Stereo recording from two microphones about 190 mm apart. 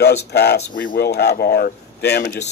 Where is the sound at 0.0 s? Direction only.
60° left (ahead or behind).